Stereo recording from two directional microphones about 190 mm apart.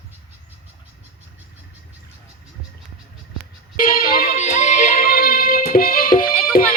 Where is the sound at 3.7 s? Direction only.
50° left (ahead or behind).